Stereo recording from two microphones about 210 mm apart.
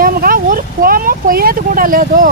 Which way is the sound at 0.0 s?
45° right (ahead or behind).